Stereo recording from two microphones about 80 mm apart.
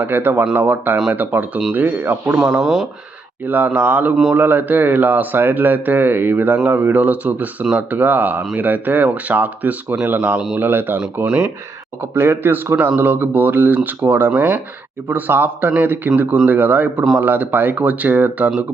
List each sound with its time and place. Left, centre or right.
0.0 s speech: right
2.4 s speech: centre
3.4 s speech: right
12.1 s speech: right